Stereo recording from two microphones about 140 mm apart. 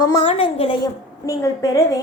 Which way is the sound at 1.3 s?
25° left (ahead or behind).